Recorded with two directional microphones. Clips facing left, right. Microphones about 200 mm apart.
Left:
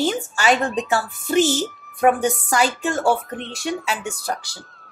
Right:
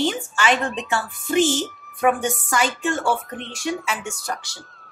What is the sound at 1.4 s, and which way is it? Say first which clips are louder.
Speech: left 1 dB; 5° left (ahead or behind).